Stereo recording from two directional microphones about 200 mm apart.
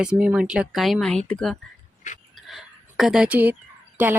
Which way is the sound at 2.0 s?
40° left (ahead or behind).